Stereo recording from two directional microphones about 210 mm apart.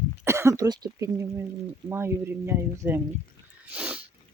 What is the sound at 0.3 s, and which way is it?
Speech, 15° right (ahead or behind).